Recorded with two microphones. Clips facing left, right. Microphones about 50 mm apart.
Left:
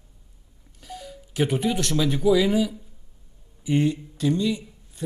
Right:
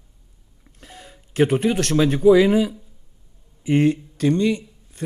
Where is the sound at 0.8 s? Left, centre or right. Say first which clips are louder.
Left 4 dB; right.